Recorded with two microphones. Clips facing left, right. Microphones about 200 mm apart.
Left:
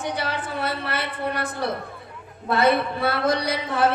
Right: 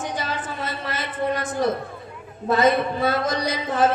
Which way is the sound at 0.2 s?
65° left (ahead or behind).